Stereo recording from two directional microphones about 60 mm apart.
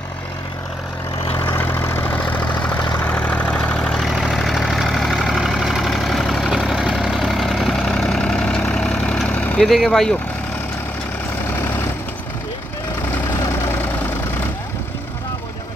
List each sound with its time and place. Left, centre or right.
1.6 s vehicle: left
2.1 s vehicle: left
3.9 s vehicle: centre
6.9 s vehicle: centre; by 9.6 s left
9.6 s speech: centre
13.3 s vehicle: left